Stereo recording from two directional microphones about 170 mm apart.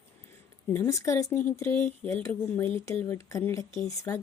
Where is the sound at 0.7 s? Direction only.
15° left (ahead or behind).